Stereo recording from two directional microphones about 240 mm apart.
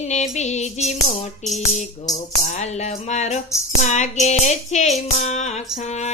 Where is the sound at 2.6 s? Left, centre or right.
Left.